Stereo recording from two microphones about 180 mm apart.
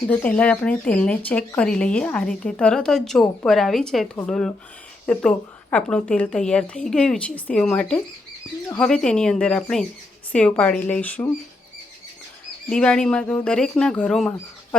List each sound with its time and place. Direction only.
0.1 s speech: 10° left (ahead or behind)
12.7 s speech: 5° left (ahead or behind)